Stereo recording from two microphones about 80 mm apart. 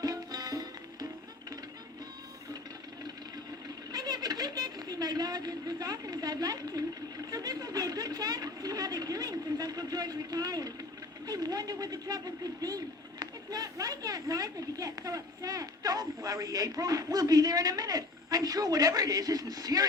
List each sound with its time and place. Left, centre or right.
0.0 s music: right
3.9 s a woman's voice: right